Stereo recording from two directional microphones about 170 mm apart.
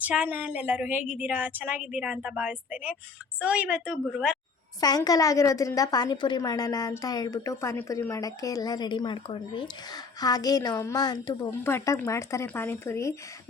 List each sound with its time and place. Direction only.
0.0 s a woman's voice: 10° right (ahead or behind)
4.8 s a woman's voice: 20° left (ahead or behind)